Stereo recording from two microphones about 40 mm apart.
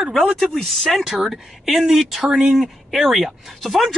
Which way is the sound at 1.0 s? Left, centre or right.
Centre.